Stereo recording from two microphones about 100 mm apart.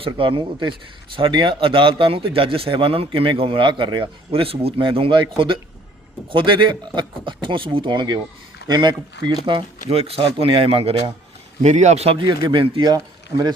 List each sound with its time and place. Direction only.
0.0 s a man's voice: 65° right (ahead or behind)
4.3 s a man's voice: 70° right (ahead or behind)
6.3 s a man's voice: 55° right (ahead or behind)
9.5 s speech: 70° right (ahead or behind)
12.2 s speech: 50° right (ahead or behind)